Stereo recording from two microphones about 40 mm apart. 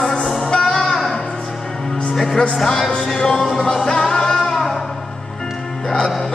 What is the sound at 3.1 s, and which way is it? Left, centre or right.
Music, centre.